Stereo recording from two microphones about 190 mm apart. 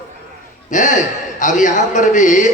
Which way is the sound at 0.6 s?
40° left (ahead or behind).